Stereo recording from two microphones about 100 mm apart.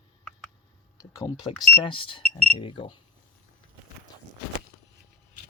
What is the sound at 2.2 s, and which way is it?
Speech, 10° left (ahead or behind).